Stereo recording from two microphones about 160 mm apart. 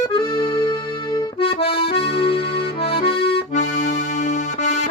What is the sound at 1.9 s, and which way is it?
Music, 35° left (ahead or behind).